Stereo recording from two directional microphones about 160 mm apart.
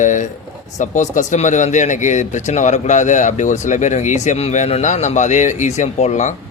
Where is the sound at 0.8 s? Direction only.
50° left (ahead or behind).